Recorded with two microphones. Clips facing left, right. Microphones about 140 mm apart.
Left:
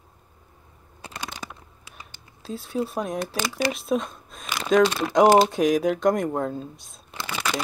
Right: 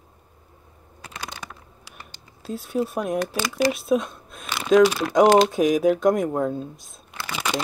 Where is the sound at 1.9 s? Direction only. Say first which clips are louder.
Right 1 dB; centre (ahead or behind).